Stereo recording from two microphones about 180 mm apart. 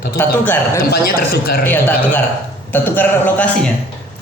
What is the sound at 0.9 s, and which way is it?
Speech, 55° left (ahead or behind).